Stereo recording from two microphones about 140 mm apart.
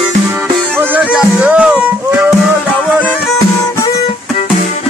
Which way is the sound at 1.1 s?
5° right (ahead or behind).